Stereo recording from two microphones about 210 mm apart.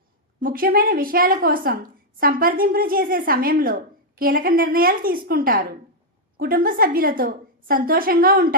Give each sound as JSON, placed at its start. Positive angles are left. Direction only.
{"t": 0.3, "sound": "a woman's voice", "side_deg": -40}